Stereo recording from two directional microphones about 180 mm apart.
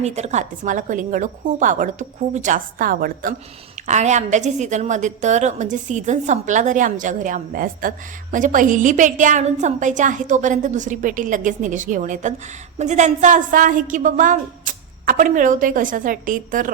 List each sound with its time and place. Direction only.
0.0 s a woman's voice: 40° right (ahead or behind)